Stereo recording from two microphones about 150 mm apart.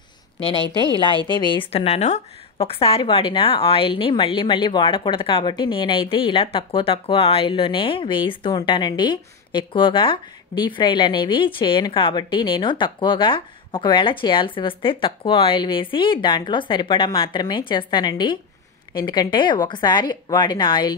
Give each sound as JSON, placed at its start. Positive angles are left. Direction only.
{"t": 0.4, "sound": "a woman's voice", "side_deg": 35}
{"t": 1.7, "sound": "a woman's voice", "side_deg": 45}